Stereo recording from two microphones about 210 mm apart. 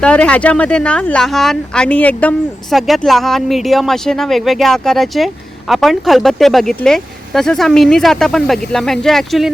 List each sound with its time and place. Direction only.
0.0 s speech: 5° left (ahead or behind)